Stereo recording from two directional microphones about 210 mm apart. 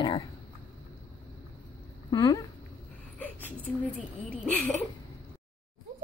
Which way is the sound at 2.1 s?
15° left (ahead or behind).